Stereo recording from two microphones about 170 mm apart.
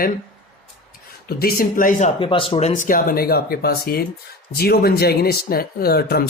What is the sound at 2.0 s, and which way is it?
Speech, 30° left (ahead or behind).